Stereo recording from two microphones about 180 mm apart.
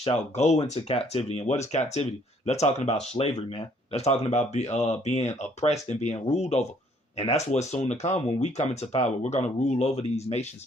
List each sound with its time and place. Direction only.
0.0 s speech: 35° left (ahead or behind)